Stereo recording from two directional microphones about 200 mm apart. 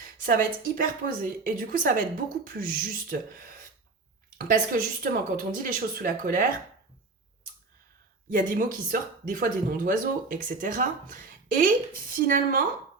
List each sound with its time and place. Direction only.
0.0 s a woman's voice: 45° right (ahead or behind)
8.3 s a woman's voice: 40° right (ahead or behind)